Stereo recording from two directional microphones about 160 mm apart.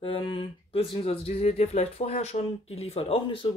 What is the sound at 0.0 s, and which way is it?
Speech, 35° left (ahead or behind).